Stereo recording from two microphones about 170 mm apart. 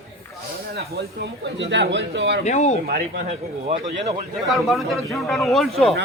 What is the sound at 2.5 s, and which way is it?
Speech, 45° left (ahead or behind).